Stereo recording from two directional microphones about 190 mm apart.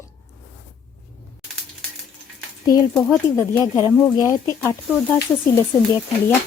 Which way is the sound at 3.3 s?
15° left (ahead or behind).